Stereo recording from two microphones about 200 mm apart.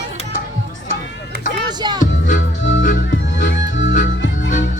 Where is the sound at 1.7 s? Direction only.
20° right (ahead or behind).